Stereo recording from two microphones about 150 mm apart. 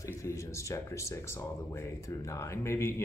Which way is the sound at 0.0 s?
20° left (ahead or behind).